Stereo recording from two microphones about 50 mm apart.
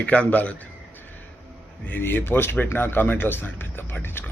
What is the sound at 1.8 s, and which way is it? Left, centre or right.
Speech, left.